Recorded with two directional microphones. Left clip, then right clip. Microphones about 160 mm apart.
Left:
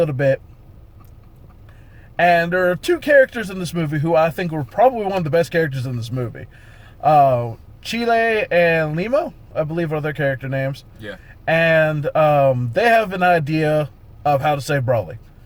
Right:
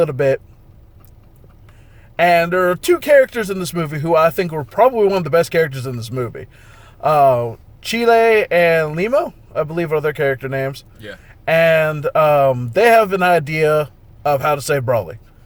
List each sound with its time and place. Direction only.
0.0 s speech: 35° right (ahead or behind)
2.1 s speech: 35° right (ahead or behind)